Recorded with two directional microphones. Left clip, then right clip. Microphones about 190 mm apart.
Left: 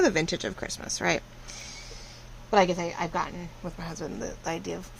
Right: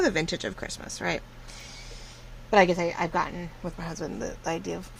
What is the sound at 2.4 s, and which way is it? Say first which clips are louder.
A woman's voice: right 2 dB; 15° right (ahead or behind).